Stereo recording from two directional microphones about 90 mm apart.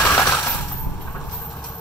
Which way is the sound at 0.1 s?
35° left (ahead or behind).